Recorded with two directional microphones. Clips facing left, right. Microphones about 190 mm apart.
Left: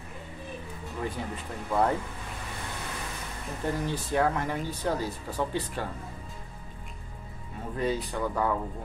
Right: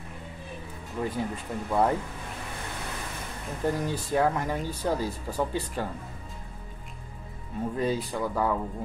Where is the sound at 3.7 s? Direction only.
15° right (ahead or behind).